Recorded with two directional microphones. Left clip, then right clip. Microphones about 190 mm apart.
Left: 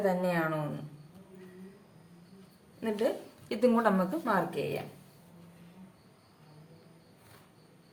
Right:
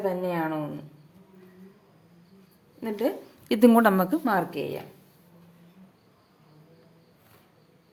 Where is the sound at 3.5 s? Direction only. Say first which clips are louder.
Right 7 dB; 50° right (ahead or behind).